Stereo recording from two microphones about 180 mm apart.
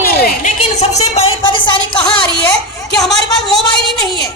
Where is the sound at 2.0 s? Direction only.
5° left (ahead or behind).